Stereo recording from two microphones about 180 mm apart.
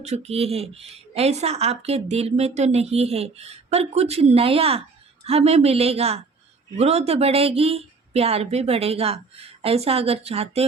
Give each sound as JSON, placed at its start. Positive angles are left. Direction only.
{"t": 0.0, "sound": "speech", "side_deg": -35}